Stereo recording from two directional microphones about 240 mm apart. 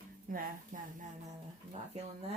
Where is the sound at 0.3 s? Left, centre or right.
Right.